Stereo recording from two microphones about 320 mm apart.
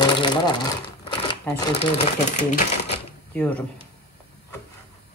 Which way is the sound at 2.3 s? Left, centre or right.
Left.